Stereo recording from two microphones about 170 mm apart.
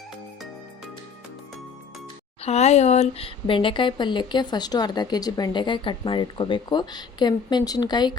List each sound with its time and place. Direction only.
2.4 s speech: 40° left (ahead or behind)